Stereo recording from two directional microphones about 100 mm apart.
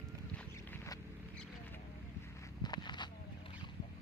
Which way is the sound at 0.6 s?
20° left (ahead or behind).